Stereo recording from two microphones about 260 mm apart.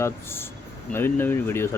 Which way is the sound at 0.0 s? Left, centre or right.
Centre.